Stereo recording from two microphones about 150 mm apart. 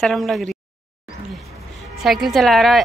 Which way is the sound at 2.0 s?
Centre (ahead or behind).